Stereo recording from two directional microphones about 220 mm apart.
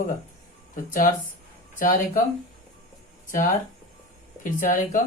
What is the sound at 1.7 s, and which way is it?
Speech, 40° left (ahead or behind).